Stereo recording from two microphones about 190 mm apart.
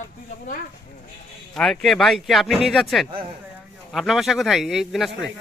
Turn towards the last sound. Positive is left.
turn(degrees=0)  # may be behind; listen again after turning